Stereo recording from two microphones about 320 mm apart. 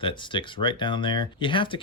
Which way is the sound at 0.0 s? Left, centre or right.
Centre.